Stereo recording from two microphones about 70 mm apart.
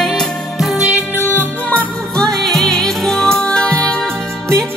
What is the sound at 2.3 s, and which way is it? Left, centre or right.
Music, centre.